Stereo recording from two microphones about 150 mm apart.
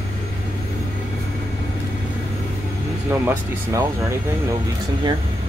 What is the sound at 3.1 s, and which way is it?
Speech, 15° right (ahead or behind).